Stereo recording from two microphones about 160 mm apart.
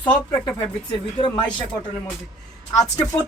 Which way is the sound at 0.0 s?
30° left (ahead or behind).